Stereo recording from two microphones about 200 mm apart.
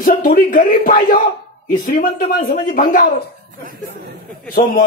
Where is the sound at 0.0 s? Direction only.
45° left (ahead or behind).